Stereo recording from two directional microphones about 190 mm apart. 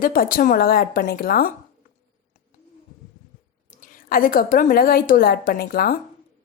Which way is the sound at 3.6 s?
45° left (ahead or behind).